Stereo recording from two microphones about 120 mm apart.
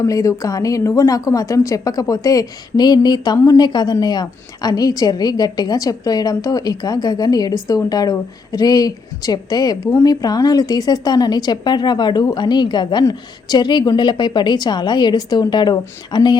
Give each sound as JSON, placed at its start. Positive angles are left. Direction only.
{"t": 0.0, "sound": "a woman's voice", "side_deg": 30}